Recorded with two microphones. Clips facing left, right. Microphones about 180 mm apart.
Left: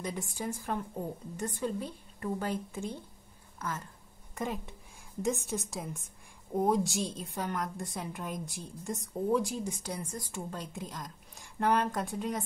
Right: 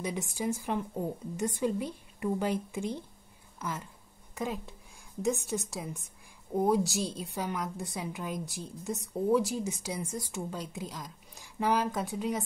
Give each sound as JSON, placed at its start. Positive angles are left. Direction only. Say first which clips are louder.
{"t": 0.0, "sound": "a woman's voice", "louder": "right 3 dB", "side_deg": -10}